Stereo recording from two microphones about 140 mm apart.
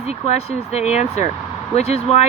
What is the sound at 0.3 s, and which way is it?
Speech, 50° left (ahead or behind).